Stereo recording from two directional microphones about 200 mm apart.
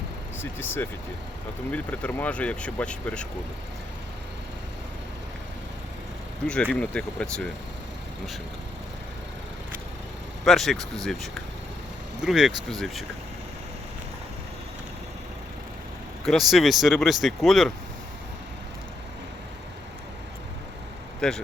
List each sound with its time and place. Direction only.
0.3 s speech: 10° left (ahead or behind)
6.5 s speech: 5° left (ahead or behind)
10.4 s speech: centre (ahead or behind)
16.2 s speech: centre (ahead or behind)
21.2 s speech: 5° left (ahead or behind)